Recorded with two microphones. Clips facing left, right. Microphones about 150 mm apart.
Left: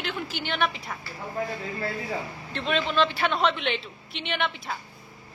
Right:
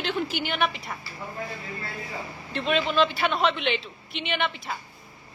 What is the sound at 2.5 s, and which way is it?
A man's voice, 5° right (ahead or behind).